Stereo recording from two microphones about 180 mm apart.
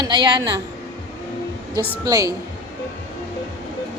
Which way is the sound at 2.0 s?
20° right (ahead or behind).